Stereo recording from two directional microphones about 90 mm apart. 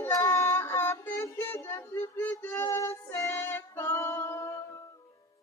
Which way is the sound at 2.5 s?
35° left (ahead or behind).